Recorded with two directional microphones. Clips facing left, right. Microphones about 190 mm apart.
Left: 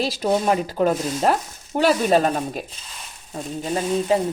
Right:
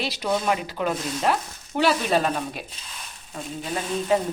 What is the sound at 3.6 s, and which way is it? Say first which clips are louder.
Speech: left 6 dB; 30° left (ahead or behind).